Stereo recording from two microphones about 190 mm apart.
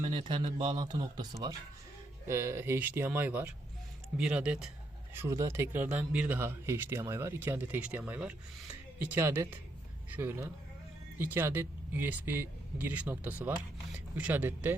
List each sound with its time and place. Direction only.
0.0 s speech: 30° right (ahead or behind); by 14.8 s 10° right (ahead or behind)